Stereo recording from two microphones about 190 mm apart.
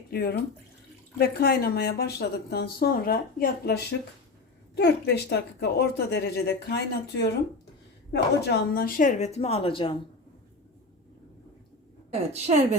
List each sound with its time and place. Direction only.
0.1 s a woman's voice: 55° left (ahead or behind); by 9.9 s 30° left (ahead or behind)
12.5 s speech: 35° right (ahead or behind)